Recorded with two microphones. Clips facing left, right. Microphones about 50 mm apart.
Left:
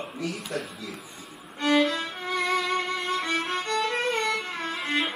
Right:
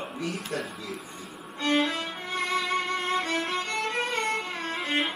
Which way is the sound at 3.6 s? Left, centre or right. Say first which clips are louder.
Left 3 dB; right.